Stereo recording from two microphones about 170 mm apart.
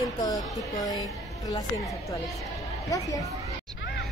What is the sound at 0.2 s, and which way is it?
Speech, 20° left (ahead or behind).